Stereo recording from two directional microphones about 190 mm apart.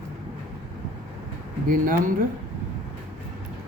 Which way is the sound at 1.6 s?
45° right (ahead or behind).